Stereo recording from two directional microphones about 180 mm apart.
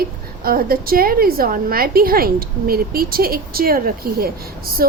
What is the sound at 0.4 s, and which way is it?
A woman's voice, 55° right (ahead or behind).